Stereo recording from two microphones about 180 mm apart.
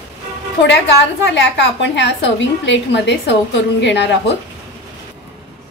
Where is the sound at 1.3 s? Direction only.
80° left.